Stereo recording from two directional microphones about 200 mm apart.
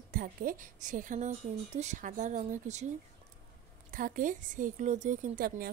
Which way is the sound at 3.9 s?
45° right (ahead or behind).